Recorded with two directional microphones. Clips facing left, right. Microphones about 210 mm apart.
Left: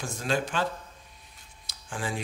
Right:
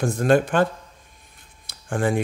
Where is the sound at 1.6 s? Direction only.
55° right (ahead or behind).